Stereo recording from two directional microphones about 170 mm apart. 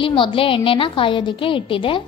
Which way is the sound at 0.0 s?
30° left (ahead or behind).